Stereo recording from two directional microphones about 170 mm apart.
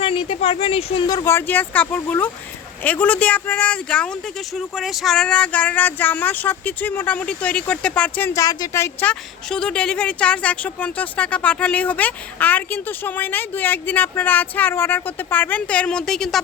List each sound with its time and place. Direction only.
0.0 s a woman's voice: 35° left (ahead or behind); by 8.3 s 10° left (ahead or behind)
8.4 s a woman's voice: 20° left (ahead or behind); by 16.4 s centre (ahead or behind)